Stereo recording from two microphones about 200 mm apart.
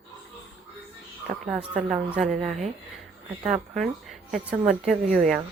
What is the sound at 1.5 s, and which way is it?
Speech, 5° right (ahead or behind).